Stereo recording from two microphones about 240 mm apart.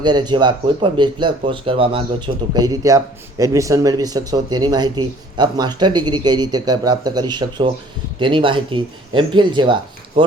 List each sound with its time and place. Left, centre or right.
0.0 s speech: centre